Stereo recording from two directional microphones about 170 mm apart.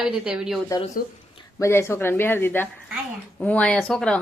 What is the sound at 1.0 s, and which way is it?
Speech, 60° left (ahead or behind).